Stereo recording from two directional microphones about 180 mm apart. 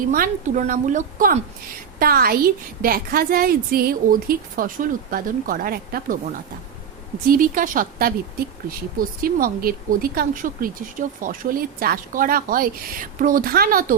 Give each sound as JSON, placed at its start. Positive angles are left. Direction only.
{"t": 0.1, "sound": "a woman's voice", "side_deg": -45}
{"t": 2.0, "sound": "a woman's voice", "side_deg": -55}
{"t": 7.3, "sound": "a woman's voice", "side_deg": -50}